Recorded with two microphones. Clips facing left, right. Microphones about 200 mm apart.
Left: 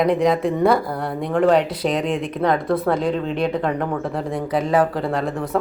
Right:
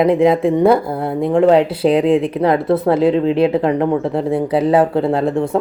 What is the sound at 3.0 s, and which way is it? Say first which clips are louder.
Speech: right 8 dB; 5° right (ahead or behind).